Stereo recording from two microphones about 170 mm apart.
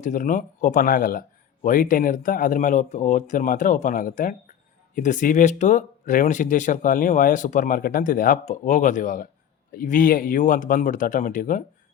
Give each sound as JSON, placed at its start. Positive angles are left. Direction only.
{"t": 0.0, "sound": "speech", "side_deg": 50}